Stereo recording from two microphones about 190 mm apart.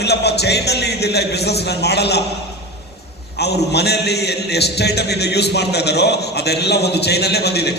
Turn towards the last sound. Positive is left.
turn(degrees=60)  # may be behind; listen again after turning